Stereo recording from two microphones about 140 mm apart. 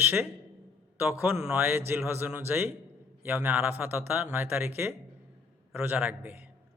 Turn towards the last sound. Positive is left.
turn(degrees=-10)  # may be behind; listen again after turning